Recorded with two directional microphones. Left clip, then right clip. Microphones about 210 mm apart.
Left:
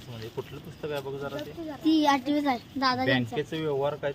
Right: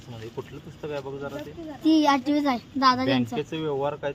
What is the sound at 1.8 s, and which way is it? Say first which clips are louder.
A child's voice: right 3 dB; 30° right (ahead or behind).